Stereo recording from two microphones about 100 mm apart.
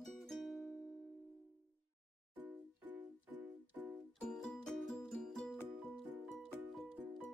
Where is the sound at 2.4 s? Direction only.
15° right (ahead or behind).